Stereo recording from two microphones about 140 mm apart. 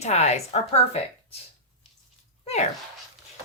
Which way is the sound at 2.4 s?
50° left (ahead or behind).